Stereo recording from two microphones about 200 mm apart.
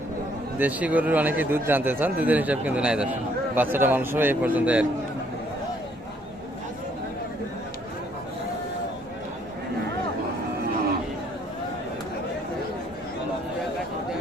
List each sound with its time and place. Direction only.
0.6 s a man's voice: 5° right (ahead or behind)